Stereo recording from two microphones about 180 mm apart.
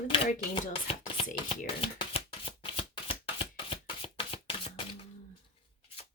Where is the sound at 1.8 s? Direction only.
30° left (ahead or behind).